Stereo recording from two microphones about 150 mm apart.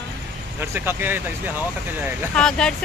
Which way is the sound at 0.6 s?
15° right (ahead or behind).